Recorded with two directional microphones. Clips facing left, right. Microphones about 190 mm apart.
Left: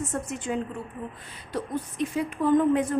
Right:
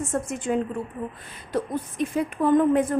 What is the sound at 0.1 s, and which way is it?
Speech, 50° right (ahead or behind).